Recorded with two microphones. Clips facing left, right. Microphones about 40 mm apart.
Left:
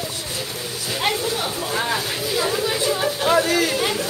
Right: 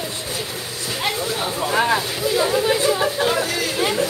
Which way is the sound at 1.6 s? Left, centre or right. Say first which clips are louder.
Right 8 dB; right.